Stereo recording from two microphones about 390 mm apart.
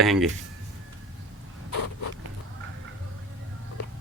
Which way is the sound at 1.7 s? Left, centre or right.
Left.